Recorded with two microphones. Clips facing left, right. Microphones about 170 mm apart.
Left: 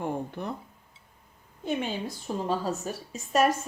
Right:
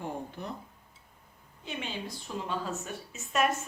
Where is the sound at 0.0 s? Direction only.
60° left (ahead or behind).